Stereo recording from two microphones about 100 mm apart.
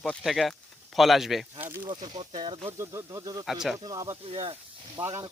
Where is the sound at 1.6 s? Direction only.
20° right (ahead or behind).